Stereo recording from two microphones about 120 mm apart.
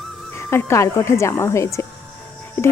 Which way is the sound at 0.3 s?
25° left (ahead or behind).